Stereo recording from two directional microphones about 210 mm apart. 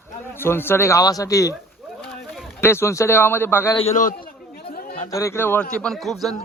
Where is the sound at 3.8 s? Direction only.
35° left (ahead or behind).